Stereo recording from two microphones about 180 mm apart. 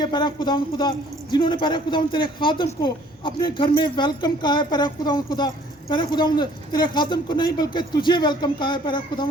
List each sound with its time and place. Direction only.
0.0 s speech: 25° left (ahead or behind)